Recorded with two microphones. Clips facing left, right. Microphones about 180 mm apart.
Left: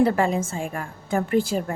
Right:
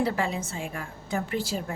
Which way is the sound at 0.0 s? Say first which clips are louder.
Left 7 dB; 50° left (ahead or behind).